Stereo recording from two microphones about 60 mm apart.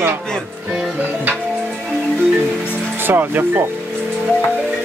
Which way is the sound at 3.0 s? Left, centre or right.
Right.